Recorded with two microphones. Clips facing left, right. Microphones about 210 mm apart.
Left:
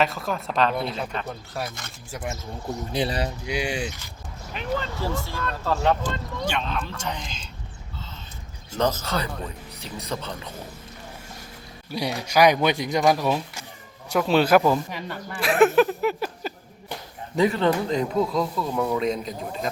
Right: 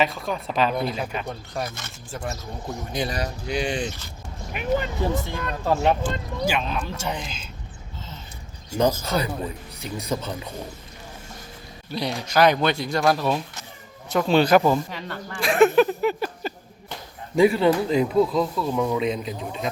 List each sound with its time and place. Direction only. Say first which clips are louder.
0.0 s speech: even; centre (ahead or behind)
2.1 s speech: right 1 dB; 20° left (ahead or behind)
2.9 s speech: left 2 dB; 30° left (ahead or behind)
3.4 s speech: right 2 dB; 10° left (ahead or behind)
4.5 s speech: right 4 dB; 15° right (ahead or behind)
8.7 s speech: right 3 dB; 10° right (ahead or behind)
11.9 s speech: even; 10° left (ahead or behind)
17.3 s speech: right 3 dB; 10° right (ahead or behind)